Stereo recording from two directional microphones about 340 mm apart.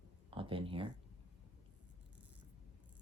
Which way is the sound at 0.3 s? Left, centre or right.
Centre.